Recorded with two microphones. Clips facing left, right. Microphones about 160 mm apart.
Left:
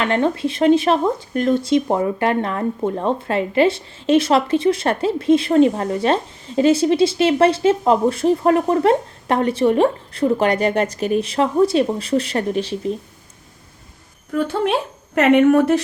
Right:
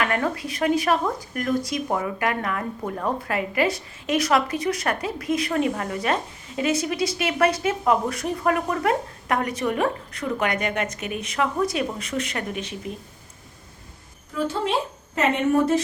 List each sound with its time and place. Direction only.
0.0 s speech: 25° left (ahead or behind)
14.3 s a woman's voice: 65° left (ahead or behind)